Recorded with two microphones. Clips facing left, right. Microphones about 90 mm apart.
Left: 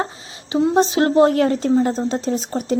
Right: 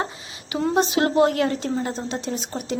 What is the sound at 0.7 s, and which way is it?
A woman's voice, 35° left (ahead or behind).